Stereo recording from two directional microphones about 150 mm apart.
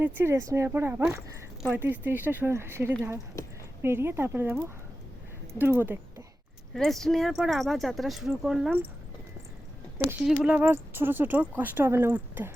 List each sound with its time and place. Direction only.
0.0 s speech: 15° right (ahead or behind)
3.3 s speech: 20° left (ahead or behind)
3.8 s speech: 15° right (ahead or behind)
6.7 s speech: centre (ahead or behind)
10.0 s speech: 15° right (ahead or behind)